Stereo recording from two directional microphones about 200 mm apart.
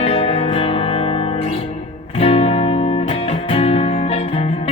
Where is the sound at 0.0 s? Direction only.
30° left (ahead or behind).